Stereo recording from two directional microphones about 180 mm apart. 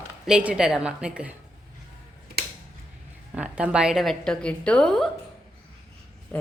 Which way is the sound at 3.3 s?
5° right (ahead or behind).